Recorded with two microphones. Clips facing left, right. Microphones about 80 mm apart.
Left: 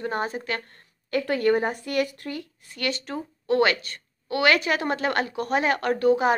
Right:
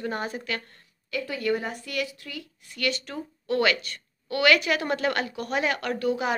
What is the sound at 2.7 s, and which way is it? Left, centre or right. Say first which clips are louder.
A woman's voice: left 1 dB; left.